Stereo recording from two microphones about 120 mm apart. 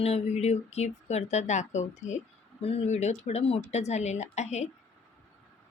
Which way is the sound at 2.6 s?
55° left (ahead or behind).